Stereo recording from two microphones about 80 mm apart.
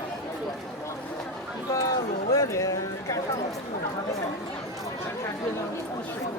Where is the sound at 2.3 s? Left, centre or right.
Left.